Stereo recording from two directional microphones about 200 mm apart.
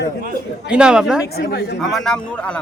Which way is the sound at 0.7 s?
5° right (ahead or behind).